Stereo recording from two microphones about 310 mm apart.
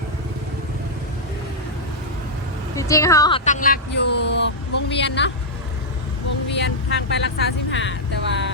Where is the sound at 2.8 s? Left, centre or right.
Centre; by 5.3 s left.